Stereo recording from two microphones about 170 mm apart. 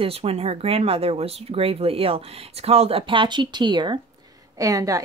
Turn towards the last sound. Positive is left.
turn(degrees=-20)  # may be behind; listen again after turning